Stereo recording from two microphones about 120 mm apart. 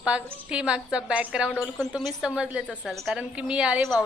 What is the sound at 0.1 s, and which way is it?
A woman's voice, 10° right (ahead or behind).